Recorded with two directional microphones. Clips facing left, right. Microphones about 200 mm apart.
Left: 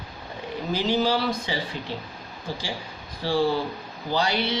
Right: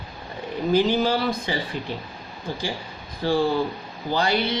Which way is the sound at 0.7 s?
50° right (ahead or behind).